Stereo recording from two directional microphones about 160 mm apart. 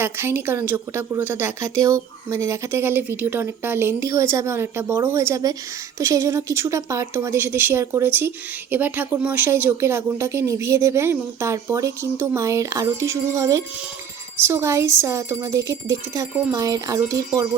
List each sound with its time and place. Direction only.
0.0 s a woman's voice: 15° right (ahead or behind)